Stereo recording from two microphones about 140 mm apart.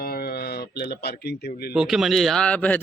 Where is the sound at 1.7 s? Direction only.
5° right (ahead or behind).